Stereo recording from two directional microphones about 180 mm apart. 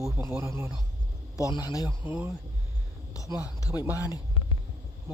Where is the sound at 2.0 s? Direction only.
10° right (ahead or behind).